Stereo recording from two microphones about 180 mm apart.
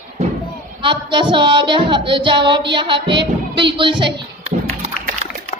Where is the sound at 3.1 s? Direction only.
25° right (ahead or behind).